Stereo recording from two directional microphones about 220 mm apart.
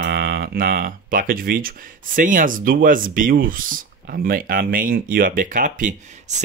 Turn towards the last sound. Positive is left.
turn(degrees=-30)  # may be behind; listen again after turning